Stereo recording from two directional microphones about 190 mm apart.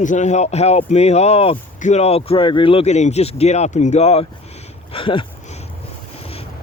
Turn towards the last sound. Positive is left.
turn(degrees=30)  # may be behind; listen again after turning